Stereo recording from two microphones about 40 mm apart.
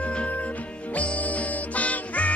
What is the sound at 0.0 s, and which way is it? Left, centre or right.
Music, left.